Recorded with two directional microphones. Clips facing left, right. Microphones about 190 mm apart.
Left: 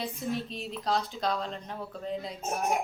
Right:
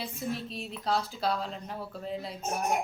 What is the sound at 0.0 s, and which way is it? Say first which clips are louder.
A woman's voice: left 2 dB; centre (ahead or behind).